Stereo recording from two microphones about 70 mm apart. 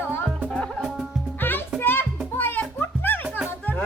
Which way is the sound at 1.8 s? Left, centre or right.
Left.